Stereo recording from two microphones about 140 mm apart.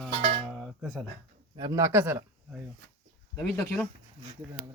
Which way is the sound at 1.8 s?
15° right (ahead or behind).